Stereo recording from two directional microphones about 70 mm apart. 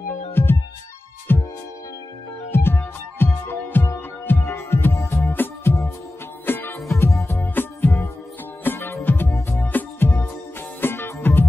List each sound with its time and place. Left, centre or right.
0.3 s music: left
2.5 s music: left